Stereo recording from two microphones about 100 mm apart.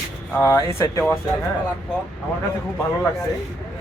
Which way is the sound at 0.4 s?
30° left (ahead or behind).